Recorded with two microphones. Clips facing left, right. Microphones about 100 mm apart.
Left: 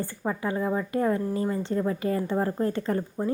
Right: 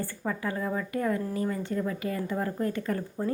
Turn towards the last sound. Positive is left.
turn(degrees=25)  # may be behind; listen again after turning